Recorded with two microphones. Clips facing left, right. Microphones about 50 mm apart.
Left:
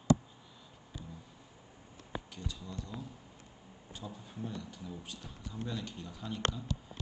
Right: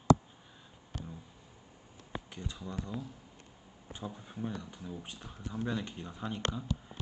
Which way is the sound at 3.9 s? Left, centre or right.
Right.